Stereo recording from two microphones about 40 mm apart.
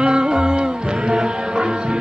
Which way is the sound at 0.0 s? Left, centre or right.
Right.